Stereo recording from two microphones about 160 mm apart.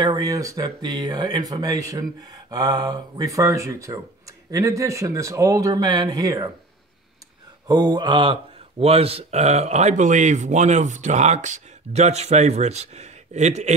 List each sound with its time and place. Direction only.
0.0 s speech: 25° right (ahead or behind)
7.6 s speech: 25° right (ahead or behind); by 13.7 s 45° right (ahead or behind)